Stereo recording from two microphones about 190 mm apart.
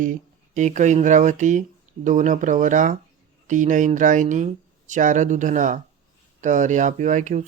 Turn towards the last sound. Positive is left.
turn(degrees=-40)  # may be behind; listen again after turning